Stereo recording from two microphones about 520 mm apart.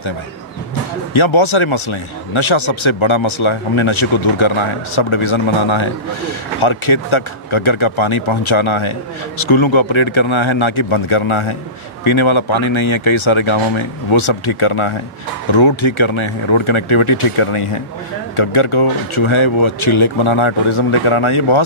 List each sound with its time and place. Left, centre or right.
1.1 s a man's voice: left